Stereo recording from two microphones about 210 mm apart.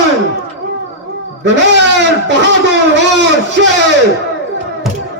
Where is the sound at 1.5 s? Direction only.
55° right (ahead or behind).